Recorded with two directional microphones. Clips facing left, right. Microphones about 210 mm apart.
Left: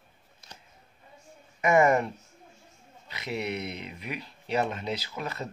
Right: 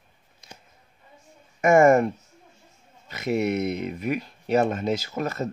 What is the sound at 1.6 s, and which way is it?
Speech, 45° right (ahead or behind).